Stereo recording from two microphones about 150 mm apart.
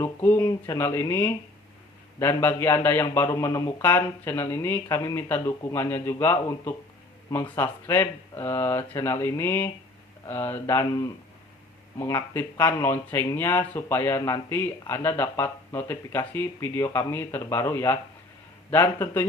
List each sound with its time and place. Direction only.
0.0 s speech: 15° left (ahead or behind)